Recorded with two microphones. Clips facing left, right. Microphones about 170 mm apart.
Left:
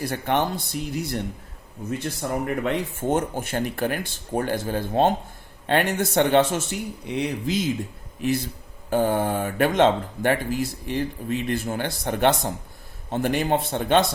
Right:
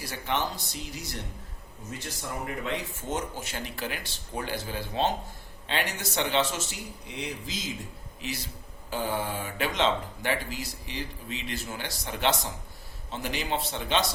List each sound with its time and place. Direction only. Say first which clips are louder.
0.0 s speech: left 7 dB; 55° left (ahead or behind)